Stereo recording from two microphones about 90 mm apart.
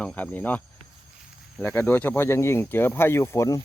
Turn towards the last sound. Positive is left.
turn(degrees=35)  # may be behind; listen again after turning